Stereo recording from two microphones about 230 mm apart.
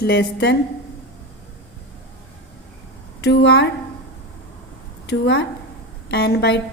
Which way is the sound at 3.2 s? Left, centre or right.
Left.